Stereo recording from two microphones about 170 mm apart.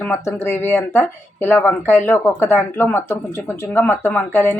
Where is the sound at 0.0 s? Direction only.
10° left (ahead or behind).